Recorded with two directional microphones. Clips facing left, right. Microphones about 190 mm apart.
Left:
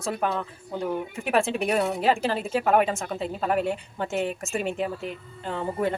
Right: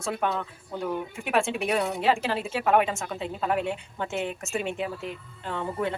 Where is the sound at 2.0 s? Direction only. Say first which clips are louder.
Left 1 dB; 40° left (ahead or behind).